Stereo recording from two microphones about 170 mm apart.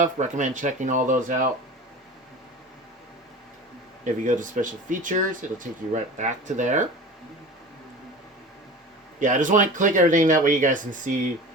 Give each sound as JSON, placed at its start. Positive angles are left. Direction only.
{"t": 0.0, "sound": "speech", "side_deg": -45}
{"t": 4.0, "sound": "speech", "side_deg": -50}
{"t": 9.1, "sound": "speech", "side_deg": -50}